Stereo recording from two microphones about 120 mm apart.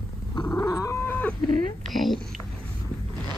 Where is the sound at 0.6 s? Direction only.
25° left (ahead or behind).